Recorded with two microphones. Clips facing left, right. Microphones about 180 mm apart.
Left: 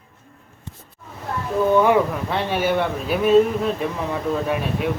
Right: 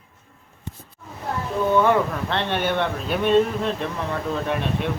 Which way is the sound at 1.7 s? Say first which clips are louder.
Left 2 dB; 10° left (ahead or behind).